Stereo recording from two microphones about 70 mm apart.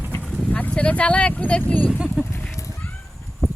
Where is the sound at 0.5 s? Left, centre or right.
Centre.